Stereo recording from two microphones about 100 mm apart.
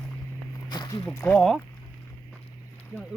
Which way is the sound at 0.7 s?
45° left (ahead or behind).